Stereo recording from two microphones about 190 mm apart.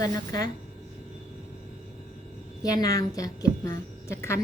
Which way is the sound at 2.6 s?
20° left (ahead or behind).